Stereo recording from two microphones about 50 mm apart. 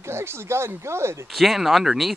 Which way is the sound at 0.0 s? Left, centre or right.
Right.